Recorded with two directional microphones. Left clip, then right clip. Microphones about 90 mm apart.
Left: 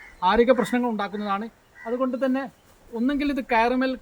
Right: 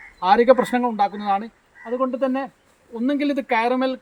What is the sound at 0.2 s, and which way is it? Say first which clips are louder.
Speech: right 4 dB; 25° right (ahead or behind).